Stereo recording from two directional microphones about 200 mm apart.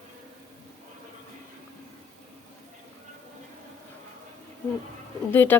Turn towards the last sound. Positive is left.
turn(degrees=10)  # may be behind; listen again after turning